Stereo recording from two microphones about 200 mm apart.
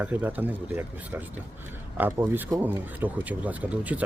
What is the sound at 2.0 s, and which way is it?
Speech, 10° right (ahead or behind).